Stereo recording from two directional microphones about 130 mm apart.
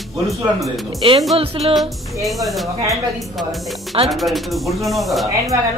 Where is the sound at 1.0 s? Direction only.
40° right (ahead or behind).